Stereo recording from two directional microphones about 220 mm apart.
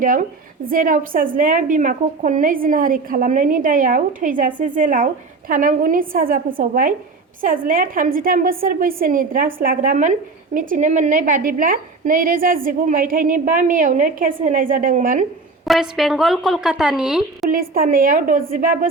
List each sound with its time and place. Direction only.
0.0 s a woman's voice: 40° right (ahead or behind)
15.6 s a woman's voice: centre (ahead or behind)
17.5 s a woman's voice: 40° right (ahead or behind)